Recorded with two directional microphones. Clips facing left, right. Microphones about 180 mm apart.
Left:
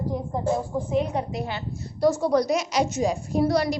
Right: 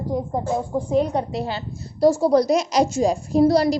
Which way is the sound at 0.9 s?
35° right (ahead or behind).